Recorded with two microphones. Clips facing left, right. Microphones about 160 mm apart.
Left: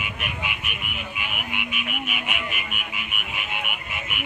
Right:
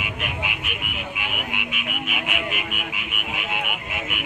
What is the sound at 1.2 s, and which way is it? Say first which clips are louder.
Frog: even; 90° right.